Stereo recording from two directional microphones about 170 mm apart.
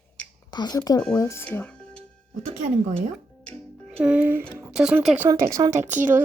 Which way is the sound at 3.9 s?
5° right (ahead or behind).